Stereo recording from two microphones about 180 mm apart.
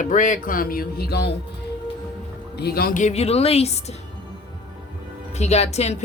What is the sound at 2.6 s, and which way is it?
Speech, 60° left (ahead or behind).